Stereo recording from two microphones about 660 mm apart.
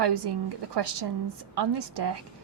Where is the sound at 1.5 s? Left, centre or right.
Right.